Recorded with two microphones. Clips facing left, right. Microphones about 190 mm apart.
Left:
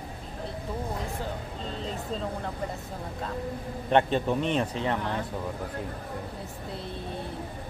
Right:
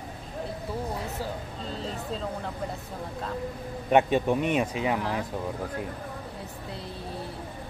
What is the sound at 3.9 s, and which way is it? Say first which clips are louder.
Speech: right 2 dB; 10° right (ahead or behind).